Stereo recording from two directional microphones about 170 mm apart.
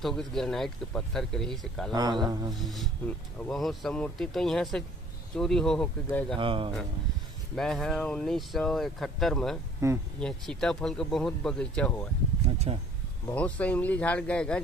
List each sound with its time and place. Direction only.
0.0 s speech: centre (ahead or behind)
1.9 s speech: 25° right (ahead or behind)
2.5 s speech: centre (ahead or behind)
6.3 s speech: 30° right (ahead or behind)
7.5 s speech: 5° left (ahead or behind)
9.8 s speech: 15° right (ahead or behind)
10.2 s speech: 5° left (ahead or behind)
12.7 s speech: 35° right (ahead or behind)
13.3 s speech: 10° left (ahead or behind)